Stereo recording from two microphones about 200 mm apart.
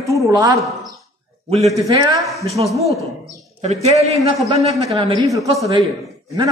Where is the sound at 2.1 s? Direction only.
Centre (ahead or behind).